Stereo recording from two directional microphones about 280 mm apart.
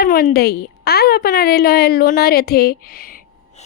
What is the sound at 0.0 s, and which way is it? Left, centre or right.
A woman's voice, left.